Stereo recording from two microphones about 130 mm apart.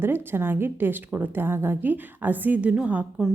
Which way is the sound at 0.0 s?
15° right (ahead or behind).